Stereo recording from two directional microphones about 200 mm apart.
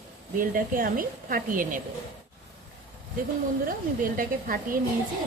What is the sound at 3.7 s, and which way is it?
Speech, 45° right (ahead or behind).